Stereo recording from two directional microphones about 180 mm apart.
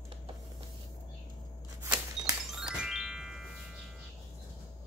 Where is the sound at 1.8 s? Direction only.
15° right (ahead or behind).